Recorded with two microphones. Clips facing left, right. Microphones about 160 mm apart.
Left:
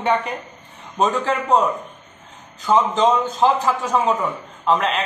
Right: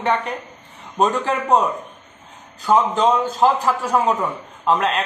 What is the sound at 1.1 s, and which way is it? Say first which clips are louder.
Speech: even; 15° right (ahead or behind).